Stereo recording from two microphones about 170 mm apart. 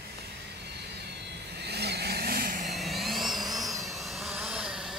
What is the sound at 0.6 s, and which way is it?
Vehicle, 75° right (ahead or behind).